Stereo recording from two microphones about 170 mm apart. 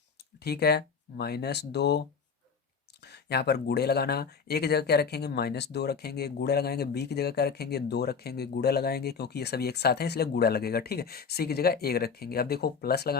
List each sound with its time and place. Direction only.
0.4 s speech: 70° left (ahead or behind)